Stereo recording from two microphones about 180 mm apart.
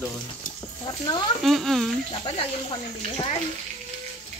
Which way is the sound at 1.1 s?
25° left (ahead or behind).